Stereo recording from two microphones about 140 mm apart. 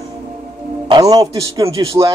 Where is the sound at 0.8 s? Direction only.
30° right (ahead or behind).